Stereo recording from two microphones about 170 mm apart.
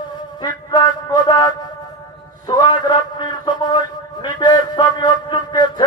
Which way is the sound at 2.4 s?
25° left (ahead or behind).